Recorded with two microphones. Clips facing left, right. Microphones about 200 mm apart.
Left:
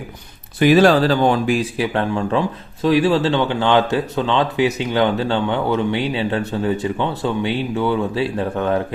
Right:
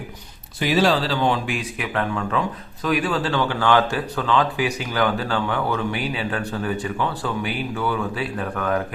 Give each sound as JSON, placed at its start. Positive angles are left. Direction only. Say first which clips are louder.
{"t": 0.6, "sound": "speech", "louder": "left 7 dB", "side_deg": 55}